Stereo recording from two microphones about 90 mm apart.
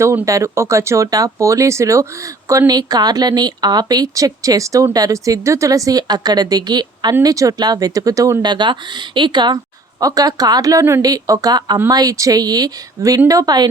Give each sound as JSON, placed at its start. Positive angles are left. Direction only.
{"t": 0.3, "sound": "speech", "side_deg": -35}
{"t": 10.0, "sound": "a woman's voice", "side_deg": -40}